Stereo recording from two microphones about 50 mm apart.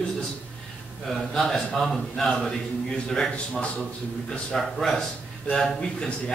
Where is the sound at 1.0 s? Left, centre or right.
Centre.